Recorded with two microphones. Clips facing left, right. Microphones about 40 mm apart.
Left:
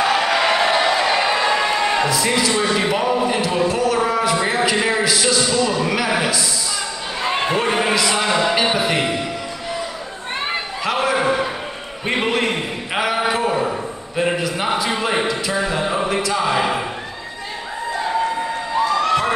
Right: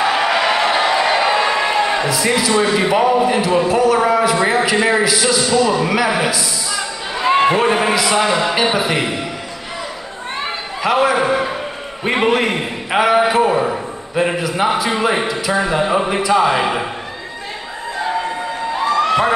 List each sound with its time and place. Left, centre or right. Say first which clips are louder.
0.0 s speech: right 2 dB; centre
7.2 s a sound: right 8 dB; right
7.5 s a man's voice: right 3 dB; centre
10.8 s a man's voice: right 5 dB; centre
18.9 s crowd: right 6 dB; centre